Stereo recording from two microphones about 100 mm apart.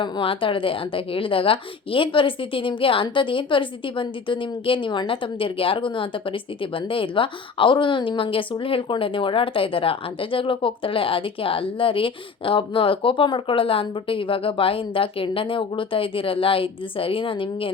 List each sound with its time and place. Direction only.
0.0 s a woman's voice: 60° left (ahead or behind)